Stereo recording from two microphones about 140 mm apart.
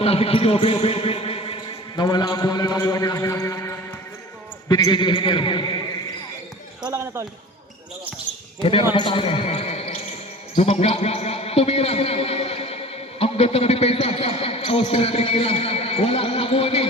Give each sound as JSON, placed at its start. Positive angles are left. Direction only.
{"t": 0.0, "sound": "a man's voice", "side_deg": 45}
{"t": 2.0, "sound": "a man's voice", "side_deg": 30}
{"t": 4.7, "sound": "a man's voice", "side_deg": 30}
{"t": 6.9, "sound": "speech", "side_deg": -20}
{"t": 8.9, "sound": "a man's voice", "side_deg": 35}